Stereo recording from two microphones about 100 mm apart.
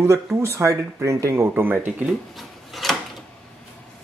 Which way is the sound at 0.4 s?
30° right (ahead or behind).